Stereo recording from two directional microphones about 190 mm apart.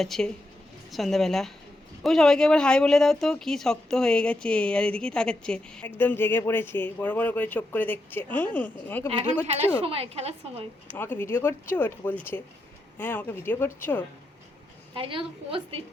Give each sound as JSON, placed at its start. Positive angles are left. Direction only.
{"t": 0.0, "sound": "speech", "side_deg": 0}
{"t": 9.0, "sound": "a woman's voice", "side_deg": -35}
{"t": 10.9, "sound": "speech", "side_deg": 10}
{"t": 14.9, "sound": "a woman's voice", "side_deg": -30}